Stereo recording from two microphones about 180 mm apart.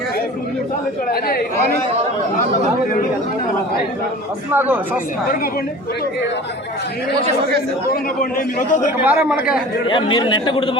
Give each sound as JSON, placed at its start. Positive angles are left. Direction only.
{"t": 1.1, "sound": "speech", "side_deg": 55}
{"t": 4.5, "sound": "speech", "side_deg": -10}
{"t": 7.9, "sound": "a man's voice", "side_deg": 50}
{"t": 9.0, "sound": "speech", "side_deg": -10}
{"t": 9.9, "sound": "a man's voice", "side_deg": 25}